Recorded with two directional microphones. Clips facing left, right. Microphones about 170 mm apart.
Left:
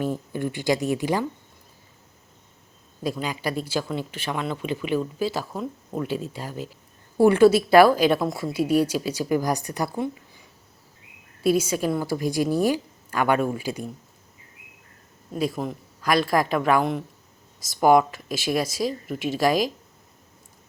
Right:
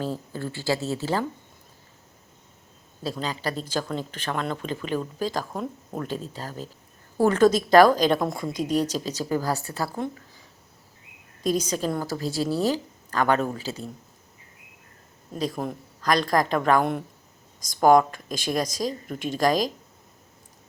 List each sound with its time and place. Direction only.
0.0 s speech: 15° left (ahead or behind)
3.0 s speech: 10° left (ahead or behind)
11.4 s speech: 10° left (ahead or behind)
15.3 s speech: 5° left (ahead or behind)